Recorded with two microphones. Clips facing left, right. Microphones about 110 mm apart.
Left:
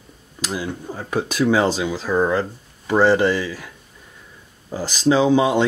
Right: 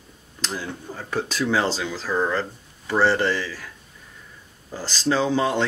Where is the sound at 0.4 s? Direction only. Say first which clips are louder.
Left 4 dB; 10° left (ahead or behind).